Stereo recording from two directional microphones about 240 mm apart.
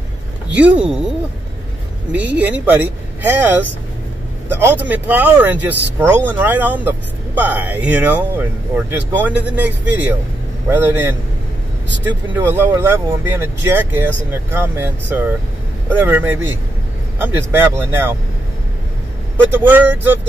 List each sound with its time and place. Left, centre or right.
0.6 s speech: centre
2.1 s speech: centre
4.5 s speech: centre
19.3 s speech: centre